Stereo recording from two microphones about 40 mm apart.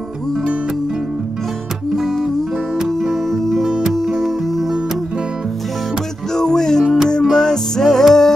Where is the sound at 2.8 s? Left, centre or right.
Centre.